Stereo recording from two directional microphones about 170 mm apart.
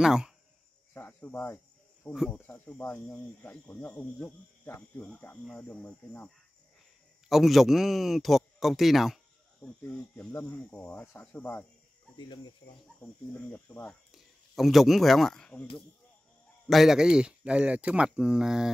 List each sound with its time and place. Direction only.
0.0 s speech: 5° right (ahead or behind)
0.9 s cricket: 15° left (ahead or behind)
2.1 s speech: 5° left (ahead or behind)
10.1 s speech: 10° left (ahead or behind)
12.2 s speech: 30° left (ahead or behind)
13.0 s speech: 10° left (ahead or behind)
16.6 s speech: centre (ahead or behind)